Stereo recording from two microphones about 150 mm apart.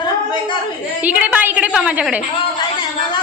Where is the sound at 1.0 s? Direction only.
10° right (ahead or behind).